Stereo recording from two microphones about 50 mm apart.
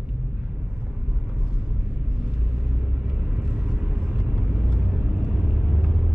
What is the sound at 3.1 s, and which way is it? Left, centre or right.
Vehicle, right.